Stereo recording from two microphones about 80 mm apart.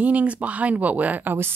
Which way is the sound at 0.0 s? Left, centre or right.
Centre.